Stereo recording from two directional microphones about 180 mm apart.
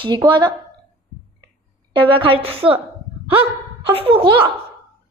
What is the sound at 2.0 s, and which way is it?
Speech, 30° right (ahead or behind).